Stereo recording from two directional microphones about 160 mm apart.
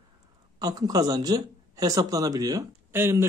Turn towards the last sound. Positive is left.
turn(degrees=-15)  # may be behind; listen again after turning